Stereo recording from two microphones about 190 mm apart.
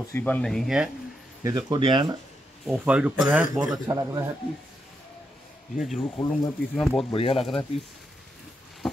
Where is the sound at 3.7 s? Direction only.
15° right (ahead or behind).